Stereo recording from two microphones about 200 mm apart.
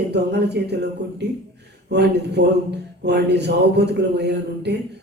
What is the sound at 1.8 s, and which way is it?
A man's voice, 55° right (ahead or behind).